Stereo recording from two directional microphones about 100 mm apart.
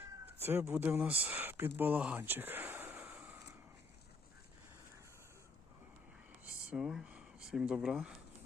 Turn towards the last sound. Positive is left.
turn(degrees=-5)  # may be behind; listen again after turning